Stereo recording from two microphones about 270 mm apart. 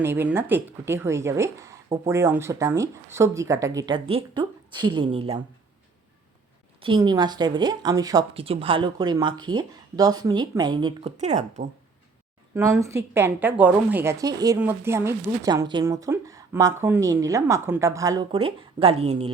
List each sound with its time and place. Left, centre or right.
0.0 s a woman's voice: centre
6.8 s a woman's voice: centre
12.5 s a woman's voice: centre